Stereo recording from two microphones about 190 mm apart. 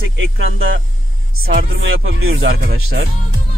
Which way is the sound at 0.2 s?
90° right.